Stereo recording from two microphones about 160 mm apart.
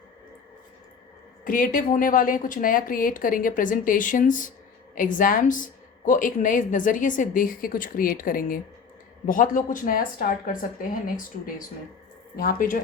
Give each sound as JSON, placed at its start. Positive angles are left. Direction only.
{"t": 1.5, "sound": "a woman's voice", "side_deg": 55}